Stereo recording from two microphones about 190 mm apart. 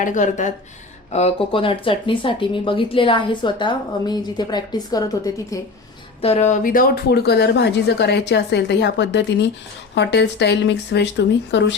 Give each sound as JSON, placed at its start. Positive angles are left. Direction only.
{"t": 0.0, "sound": "speech", "side_deg": 40}
{"t": 6.2, "sound": "speech", "side_deg": 35}